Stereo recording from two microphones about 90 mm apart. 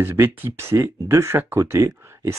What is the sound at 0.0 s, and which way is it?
Speech, 25° right (ahead or behind).